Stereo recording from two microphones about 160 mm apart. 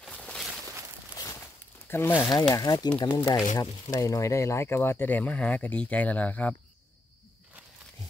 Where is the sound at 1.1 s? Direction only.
20° left (ahead or behind).